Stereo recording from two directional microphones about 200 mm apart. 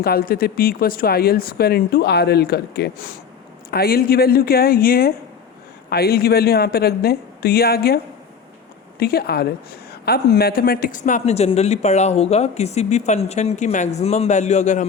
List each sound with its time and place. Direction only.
0.0 s speech: 50° left (ahead or behind)